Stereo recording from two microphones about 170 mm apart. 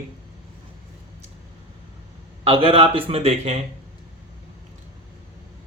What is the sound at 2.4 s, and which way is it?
A man's voice, 35° right (ahead or behind).